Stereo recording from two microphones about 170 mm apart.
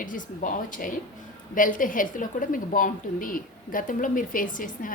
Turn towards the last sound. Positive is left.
turn(degrees=55)  # may be behind; listen again after turning